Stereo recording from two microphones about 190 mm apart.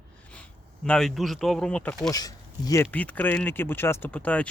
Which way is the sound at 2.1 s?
20° left (ahead or behind).